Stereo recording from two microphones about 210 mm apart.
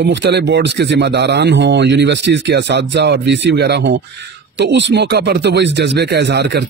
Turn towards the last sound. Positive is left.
turn(degrees=-55)  # may be behind; listen again after turning